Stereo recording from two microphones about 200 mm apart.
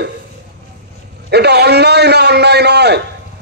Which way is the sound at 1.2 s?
55° right (ahead or behind).